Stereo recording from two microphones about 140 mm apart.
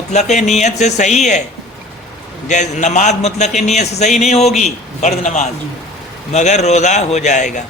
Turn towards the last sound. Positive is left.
turn(degrees=60)  # may be behind; listen again after turning